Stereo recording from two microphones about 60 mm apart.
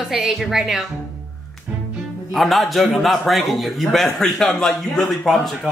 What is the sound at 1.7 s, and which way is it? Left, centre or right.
Music, right.